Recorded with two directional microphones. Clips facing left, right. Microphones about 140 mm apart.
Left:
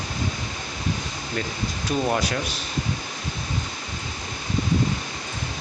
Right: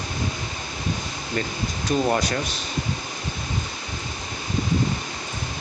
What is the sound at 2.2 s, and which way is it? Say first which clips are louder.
Speech: right 1 dB; 10° left (ahead or behind).